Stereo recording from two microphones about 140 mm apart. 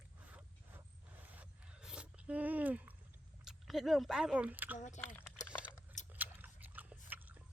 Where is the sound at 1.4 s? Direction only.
5° right (ahead or behind).